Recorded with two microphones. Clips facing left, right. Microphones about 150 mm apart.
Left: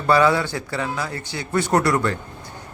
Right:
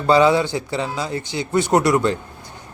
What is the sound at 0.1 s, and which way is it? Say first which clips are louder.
A man's voice: right 3 dB; 20° right (ahead or behind).